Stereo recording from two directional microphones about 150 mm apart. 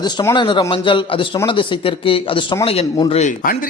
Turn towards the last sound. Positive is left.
turn(degrees=45)  # may be behind; listen again after turning